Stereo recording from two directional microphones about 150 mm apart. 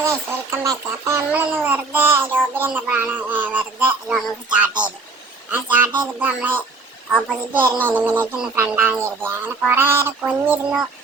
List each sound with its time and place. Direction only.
0.0 s speech: 20° right (ahead or behind)